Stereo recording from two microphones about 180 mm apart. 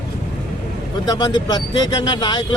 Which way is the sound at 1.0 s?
20° left (ahead or behind).